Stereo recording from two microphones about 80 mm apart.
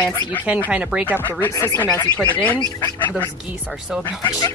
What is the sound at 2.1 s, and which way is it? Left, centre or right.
Speech, centre.